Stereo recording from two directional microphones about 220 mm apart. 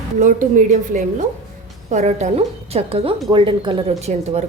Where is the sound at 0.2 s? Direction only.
35° right (ahead or behind).